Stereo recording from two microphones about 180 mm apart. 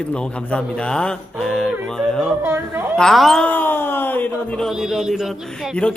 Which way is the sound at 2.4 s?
15° right (ahead or behind).